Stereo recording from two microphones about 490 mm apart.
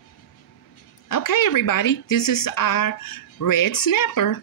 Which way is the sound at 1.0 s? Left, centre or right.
Left.